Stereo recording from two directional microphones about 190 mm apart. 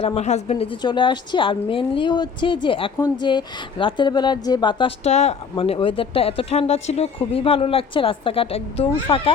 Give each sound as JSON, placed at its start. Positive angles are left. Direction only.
{"t": 0.0, "sound": "a woman's voice", "side_deg": 35}
{"t": 5.0, "sound": "a woman's voice", "side_deg": 35}